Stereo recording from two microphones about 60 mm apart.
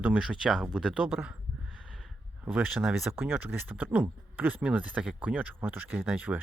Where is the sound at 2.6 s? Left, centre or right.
Centre.